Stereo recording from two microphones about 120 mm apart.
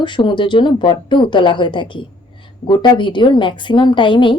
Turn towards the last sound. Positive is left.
turn(degrees=40)  # may be behind; listen again after turning